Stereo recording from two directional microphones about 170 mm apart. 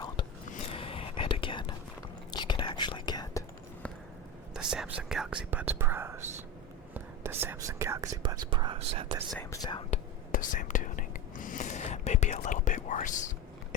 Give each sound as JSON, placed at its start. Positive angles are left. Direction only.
{"t": 0.7, "sound": "whispering", "side_deg": 35}
{"t": 4.5, "sound": "whispering", "side_deg": -5}
{"t": 9.4, "sound": "whispering", "side_deg": 20}
{"t": 9.9, "sound": "whispering", "side_deg": 50}